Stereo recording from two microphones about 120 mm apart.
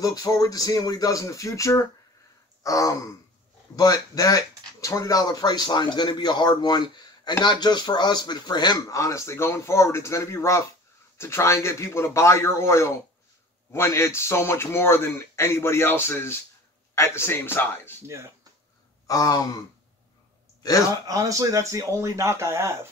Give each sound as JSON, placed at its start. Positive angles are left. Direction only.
{"t": 0.0, "sound": "speech", "side_deg": 30}
{"t": 18.0, "sound": "speech", "side_deg": -25}
{"t": 19.0, "sound": "speech", "side_deg": 30}
{"t": 21.1, "sound": "speech", "side_deg": -30}